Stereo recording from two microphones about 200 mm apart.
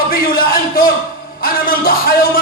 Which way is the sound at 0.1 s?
45° left (ahead or behind).